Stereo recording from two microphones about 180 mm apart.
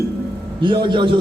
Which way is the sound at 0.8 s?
25° right (ahead or behind).